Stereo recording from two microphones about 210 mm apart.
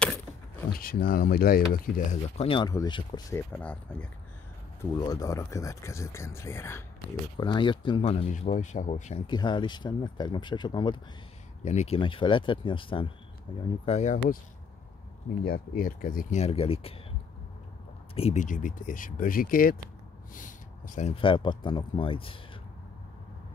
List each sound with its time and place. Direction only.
0.0 s keys jangling: 5° left (ahead or behind)
0.7 s speech: 45° left (ahead or behind)
2.3 s speech: 25° left (ahead or behind); by 4.1 s 5° left (ahead or behind)
4.9 s speech: 15° left (ahead or behind); by 9.2 s 35° left (ahead or behind)
9.3 s speech: 20° left (ahead or behind)
11.6 s speech: 30° left (ahead or behind)
15.4 s speech: 40° left (ahead or behind)
18.1 s speech: 30° left (ahead or behind)
20.3 s a sound: 40° left (ahead or behind)
21.1 s speech: 25° left (ahead or behind)